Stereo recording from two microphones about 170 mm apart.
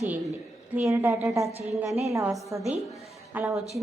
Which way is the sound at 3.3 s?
15° right (ahead or behind).